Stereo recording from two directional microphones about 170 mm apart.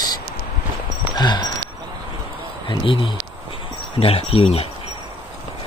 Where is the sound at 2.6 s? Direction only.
30° left (ahead or behind).